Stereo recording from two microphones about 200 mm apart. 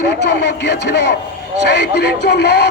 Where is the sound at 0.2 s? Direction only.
55° left (ahead or behind).